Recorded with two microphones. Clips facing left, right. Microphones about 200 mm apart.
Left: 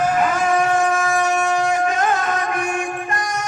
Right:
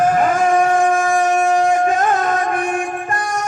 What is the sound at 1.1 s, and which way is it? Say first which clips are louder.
Shofar: right 3 dB; 50° right (ahead or behind).